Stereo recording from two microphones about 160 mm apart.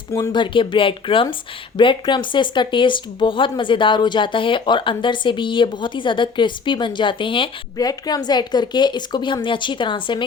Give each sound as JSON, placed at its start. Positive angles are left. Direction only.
{"t": 0.1, "sound": "speech", "side_deg": 25}